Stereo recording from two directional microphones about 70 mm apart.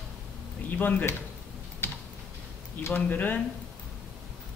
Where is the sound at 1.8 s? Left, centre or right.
Left.